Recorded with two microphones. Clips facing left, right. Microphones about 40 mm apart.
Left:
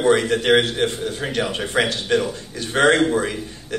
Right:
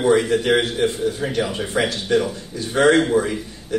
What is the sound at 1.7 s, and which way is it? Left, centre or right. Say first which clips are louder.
A man's voice: even; left.